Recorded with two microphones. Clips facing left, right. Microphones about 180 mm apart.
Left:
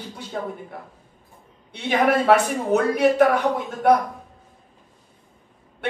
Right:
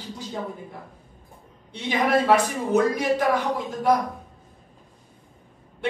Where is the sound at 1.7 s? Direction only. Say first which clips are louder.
Left 3 dB; 65° left (ahead or behind).